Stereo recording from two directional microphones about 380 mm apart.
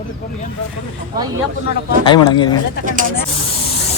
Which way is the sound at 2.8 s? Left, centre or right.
Right.